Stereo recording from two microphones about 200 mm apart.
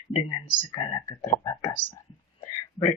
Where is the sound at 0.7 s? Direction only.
20° left (ahead or behind).